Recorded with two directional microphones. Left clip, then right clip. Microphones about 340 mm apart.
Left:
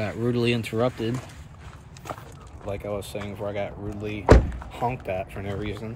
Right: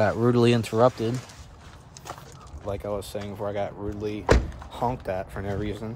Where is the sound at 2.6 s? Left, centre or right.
Centre.